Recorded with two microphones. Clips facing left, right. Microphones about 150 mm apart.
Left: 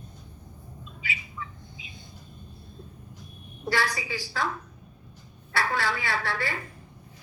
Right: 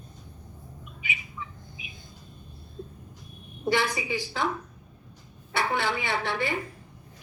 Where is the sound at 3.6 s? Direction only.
20° right (ahead or behind).